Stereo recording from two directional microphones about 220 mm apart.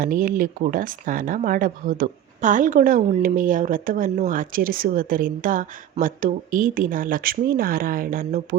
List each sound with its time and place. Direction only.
0.0 s speech: 40° right (ahead or behind)